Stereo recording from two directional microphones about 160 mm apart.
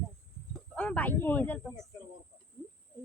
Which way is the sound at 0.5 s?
5° left (ahead or behind).